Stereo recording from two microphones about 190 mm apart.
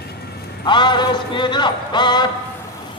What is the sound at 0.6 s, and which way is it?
A man's voice, 25° left (ahead or behind).